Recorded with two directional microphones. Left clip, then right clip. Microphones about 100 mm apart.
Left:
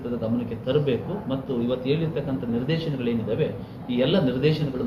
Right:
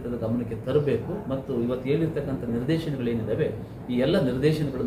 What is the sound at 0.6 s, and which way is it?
A man's voice, 30° right (ahead or behind).